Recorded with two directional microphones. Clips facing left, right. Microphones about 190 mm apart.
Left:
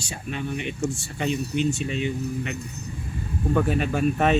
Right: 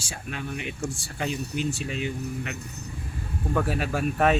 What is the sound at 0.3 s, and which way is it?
Speech, 5° right (ahead or behind).